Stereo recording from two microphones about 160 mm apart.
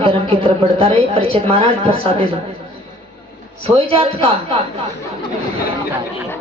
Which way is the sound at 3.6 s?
35° right (ahead or behind).